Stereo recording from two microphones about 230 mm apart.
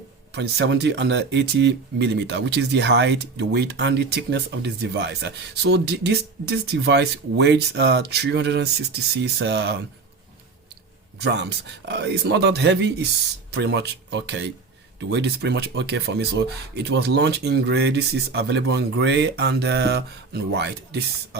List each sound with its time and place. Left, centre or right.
0.3 s speech: right
11.2 s speech: right